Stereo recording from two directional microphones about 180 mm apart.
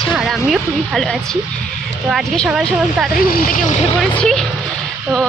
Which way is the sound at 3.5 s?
45° left (ahead or behind).